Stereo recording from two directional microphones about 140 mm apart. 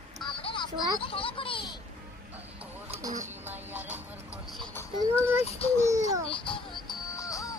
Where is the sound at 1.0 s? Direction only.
40° left (ahead or behind).